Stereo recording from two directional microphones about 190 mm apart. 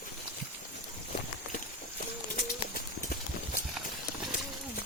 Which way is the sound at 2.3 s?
50° left (ahead or behind).